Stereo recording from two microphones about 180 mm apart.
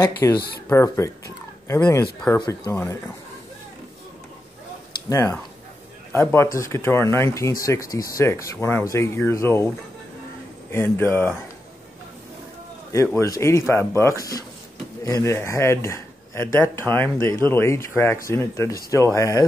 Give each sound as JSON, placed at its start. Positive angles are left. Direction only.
{"t": 0.0, "sound": "speech", "side_deg": 20}
{"t": 4.9, "sound": "speech", "side_deg": 20}
{"t": 10.7, "sound": "speech", "side_deg": 15}
{"t": 12.9, "sound": "a man's voice", "side_deg": 15}